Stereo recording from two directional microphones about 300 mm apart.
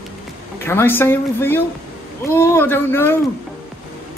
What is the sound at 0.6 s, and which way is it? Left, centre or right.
Speech, centre.